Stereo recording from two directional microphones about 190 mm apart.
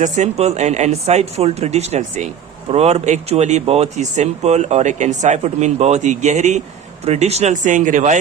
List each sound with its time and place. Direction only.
0.0 s speech: 35° right (ahead or behind)